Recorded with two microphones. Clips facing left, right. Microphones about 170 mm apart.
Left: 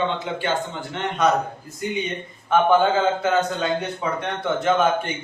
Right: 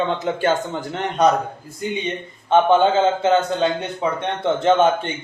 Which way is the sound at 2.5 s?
25° right (ahead or behind).